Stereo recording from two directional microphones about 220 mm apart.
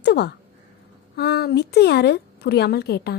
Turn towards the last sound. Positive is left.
turn(degrees=45)  # may be behind; listen again after turning